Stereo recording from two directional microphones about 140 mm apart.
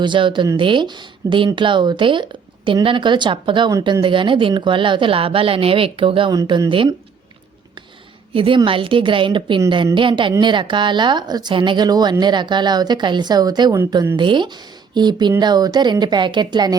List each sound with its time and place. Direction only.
0.0 s speech: 35° right (ahead or behind)
3.7 s speech: 25° right (ahead or behind)
4.0 s speech: 35° right (ahead or behind)
6.3 s speech: 25° right (ahead or behind)
6.7 s speech: 35° right (ahead or behind)
8.3 s speech: 40° right (ahead or behind)